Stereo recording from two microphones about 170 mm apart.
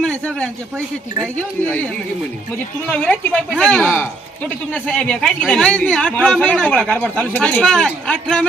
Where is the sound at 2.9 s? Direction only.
5° left (ahead or behind).